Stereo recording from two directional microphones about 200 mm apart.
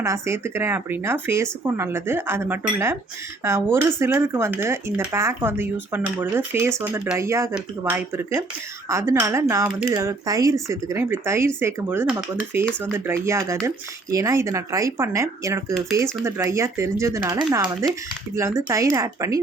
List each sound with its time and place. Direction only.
0.0 s speech: 15° right (ahead or behind)